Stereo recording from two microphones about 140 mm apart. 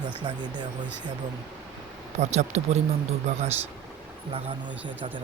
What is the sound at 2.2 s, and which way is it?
Speech, 55° right (ahead or behind).